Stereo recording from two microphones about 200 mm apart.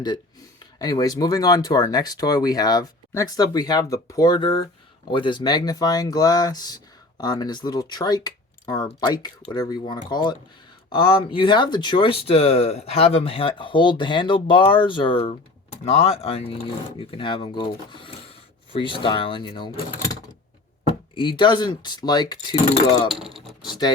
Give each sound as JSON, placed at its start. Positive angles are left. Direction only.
{"t": 0.6, "sound": "speech", "side_deg": 20}
{"t": 23.0, "sound": "speech", "side_deg": 0}
{"t": 23.6, "sound": "a sound", "side_deg": 20}